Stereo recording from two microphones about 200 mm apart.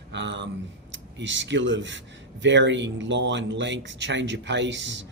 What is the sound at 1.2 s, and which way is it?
Speech, 65° right (ahead or behind).